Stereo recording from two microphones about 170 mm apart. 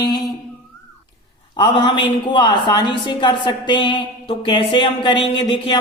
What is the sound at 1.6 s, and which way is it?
A woman's voice, 30° left (ahead or behind).